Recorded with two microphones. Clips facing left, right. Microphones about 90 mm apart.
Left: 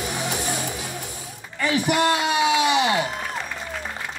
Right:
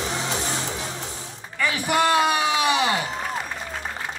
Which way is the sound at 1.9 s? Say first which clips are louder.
Right 4 dB; 35° right (ahead or behind).